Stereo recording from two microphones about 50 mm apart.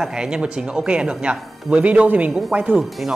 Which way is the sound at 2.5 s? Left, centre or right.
Right.